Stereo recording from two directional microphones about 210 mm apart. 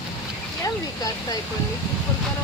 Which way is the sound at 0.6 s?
15° left (ahead or behind).